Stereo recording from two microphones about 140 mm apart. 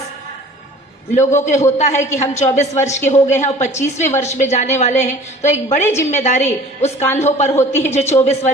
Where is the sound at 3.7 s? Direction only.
20° left (ahead or behind).